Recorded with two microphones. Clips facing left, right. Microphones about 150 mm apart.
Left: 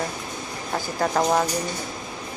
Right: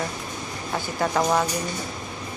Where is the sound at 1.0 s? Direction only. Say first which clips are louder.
Left 1 dB; 35° left (ahead or behind).